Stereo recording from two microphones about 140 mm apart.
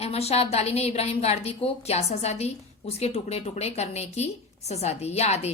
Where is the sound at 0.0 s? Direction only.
45° left (ahead or behind).